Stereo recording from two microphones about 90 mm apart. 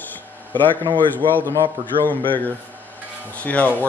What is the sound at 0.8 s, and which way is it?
Speech, 60° right (ahead or behind).